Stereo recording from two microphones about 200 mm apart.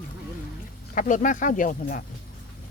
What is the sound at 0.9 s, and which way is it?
Speech, 40° left (ahead or behind).